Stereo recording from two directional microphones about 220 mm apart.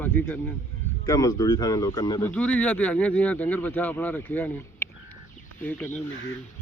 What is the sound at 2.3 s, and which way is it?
Speech, 5° left (ahead or behind).